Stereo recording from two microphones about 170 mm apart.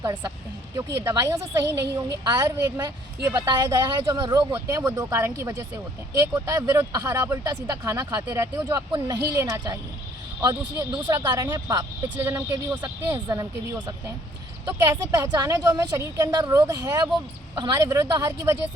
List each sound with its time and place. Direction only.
0.9 s a woman's voice: 15° right (ahead or behind)